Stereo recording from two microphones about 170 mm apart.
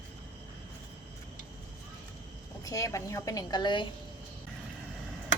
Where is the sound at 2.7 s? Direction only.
20° left (ahead or behind).